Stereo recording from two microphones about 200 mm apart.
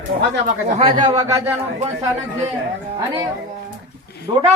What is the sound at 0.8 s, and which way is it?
Speech, 30° right (ahead or behind).